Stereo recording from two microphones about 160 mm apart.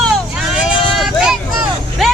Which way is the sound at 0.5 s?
Centre (ahead or behind).